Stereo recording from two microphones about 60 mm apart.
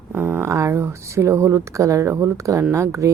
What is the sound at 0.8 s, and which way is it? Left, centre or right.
Speech, right.